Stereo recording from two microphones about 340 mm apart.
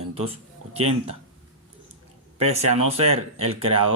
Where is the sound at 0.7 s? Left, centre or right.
Centre.